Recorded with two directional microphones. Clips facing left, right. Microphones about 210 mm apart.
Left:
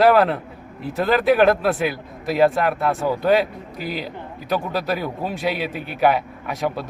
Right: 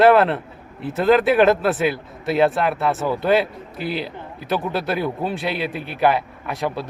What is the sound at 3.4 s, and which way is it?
Speech, 45° left (ahead or behind).